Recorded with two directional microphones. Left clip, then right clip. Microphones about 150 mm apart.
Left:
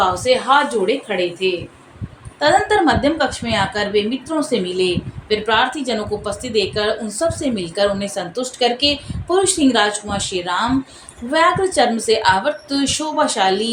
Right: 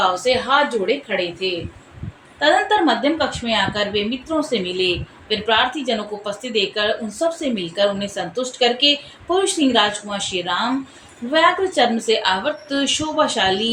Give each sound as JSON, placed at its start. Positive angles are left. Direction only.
{"t": 0.1, "sound": "a woman's voice", "side_deg": 50}
{"t": 2.4, "sound": "a woman's voice", "side_deg": 40}